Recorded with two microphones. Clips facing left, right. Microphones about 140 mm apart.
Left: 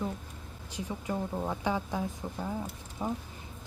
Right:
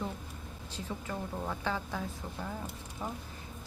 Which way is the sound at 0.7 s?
15° left (ahead or behind).